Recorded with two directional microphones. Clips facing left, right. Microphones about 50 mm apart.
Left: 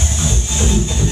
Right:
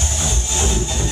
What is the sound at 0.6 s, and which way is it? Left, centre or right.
Music, left.